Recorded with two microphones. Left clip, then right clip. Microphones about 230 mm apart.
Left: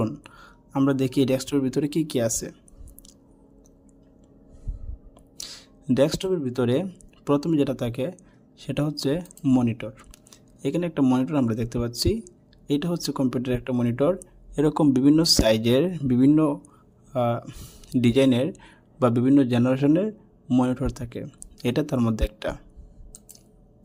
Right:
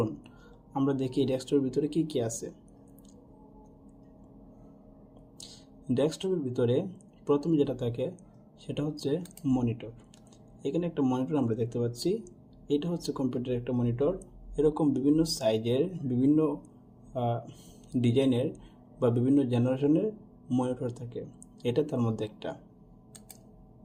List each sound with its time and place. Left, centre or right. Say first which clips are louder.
0.0 s speech: left 3 dB; left
5.4 s a man's voice: left 10 dB; left